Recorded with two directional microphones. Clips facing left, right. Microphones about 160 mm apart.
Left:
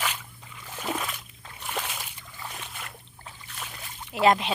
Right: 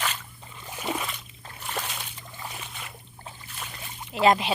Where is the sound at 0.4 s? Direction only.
30° right (ahead or behind).